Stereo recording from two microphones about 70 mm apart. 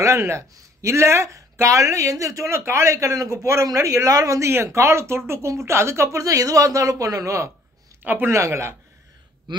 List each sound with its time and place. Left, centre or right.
0.0 s speech: right
8.0 s speech: right
8.3 s speech: right
9.5 s speech: right